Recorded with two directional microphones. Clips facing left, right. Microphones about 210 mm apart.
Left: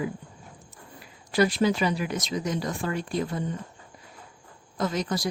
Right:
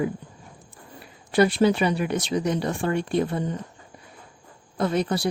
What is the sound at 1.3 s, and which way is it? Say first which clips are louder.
Speech: right 4 dB; 30° right (ahead or behind).